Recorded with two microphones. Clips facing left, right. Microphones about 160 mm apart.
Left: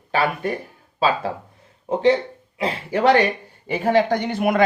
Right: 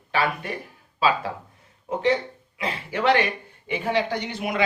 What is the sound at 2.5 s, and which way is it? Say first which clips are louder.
Speech: left 6 dB; 35° left (ahead or behind).